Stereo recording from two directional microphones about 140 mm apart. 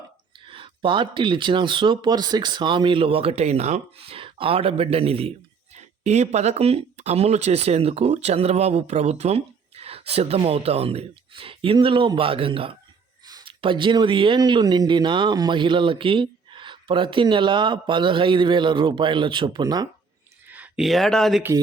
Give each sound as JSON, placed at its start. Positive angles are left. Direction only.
{"t": 0.4, "sound": "speech", "side_deg": -40}
{"t": 20.5, "sound": "speech", "side_deg": -5}